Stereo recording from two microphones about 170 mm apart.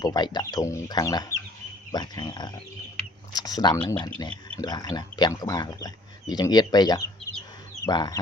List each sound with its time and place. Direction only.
0.0 s speech: 25° left (ahead or behind)